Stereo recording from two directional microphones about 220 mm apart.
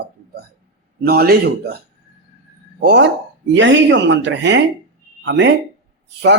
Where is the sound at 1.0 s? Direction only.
45° right (ahead or behind).